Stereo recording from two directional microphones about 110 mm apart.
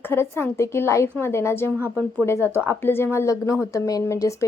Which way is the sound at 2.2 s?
25° left (ahead or behind).